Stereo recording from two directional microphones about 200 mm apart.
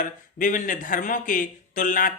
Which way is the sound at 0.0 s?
40° left (ahead or behind).